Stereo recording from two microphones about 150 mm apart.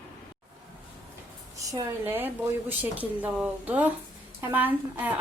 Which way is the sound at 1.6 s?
20° right (ahead or behind).